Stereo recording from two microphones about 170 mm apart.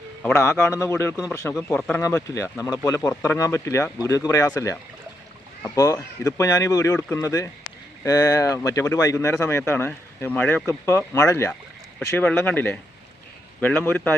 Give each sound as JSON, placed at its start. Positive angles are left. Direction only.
{"t": 0.2, "sound": "a man's voice", "side_deg": 10}
{"t": 2.0, "sound": "speech", "side_deg": 20}